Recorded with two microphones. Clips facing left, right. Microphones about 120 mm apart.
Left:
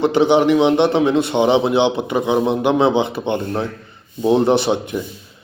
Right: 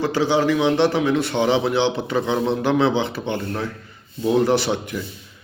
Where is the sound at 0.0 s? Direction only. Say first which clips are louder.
Left 5 dB; 20° left (ahead or behind).